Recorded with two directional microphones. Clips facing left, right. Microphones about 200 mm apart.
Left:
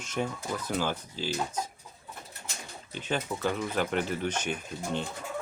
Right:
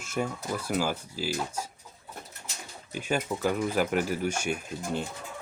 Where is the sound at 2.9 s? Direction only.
10° right (ahead or behind).